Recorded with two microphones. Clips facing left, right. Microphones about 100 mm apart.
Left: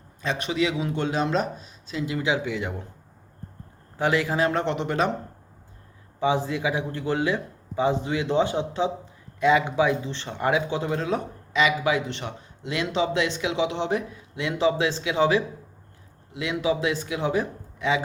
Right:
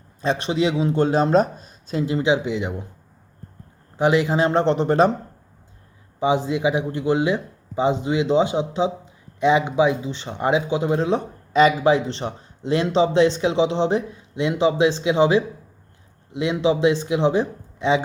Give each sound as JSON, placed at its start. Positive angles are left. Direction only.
{"t": 0.2, "sound": "speech", "side_deg": -30}
{"t": 2.0, "sound": "a man's voice", "side_deg": -25}
{"t": 3.9, "sound": "a man's voice", "side_deg": -20}
{"t": 6.1, "sound": "a man's voice", "side_deg": -20}
{"t": 11.5, "sound": "a man's voice", "side_deg": -35}